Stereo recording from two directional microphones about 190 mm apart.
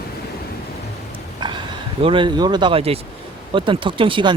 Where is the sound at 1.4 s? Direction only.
25° right (ahead or behind).